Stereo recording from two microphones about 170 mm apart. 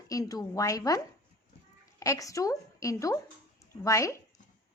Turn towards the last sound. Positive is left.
turn(degrees=20)  # may be behind; listen again after turning